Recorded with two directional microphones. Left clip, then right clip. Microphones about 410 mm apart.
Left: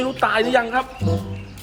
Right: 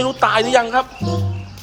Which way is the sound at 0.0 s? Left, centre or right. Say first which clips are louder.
Right 3 dB; centre.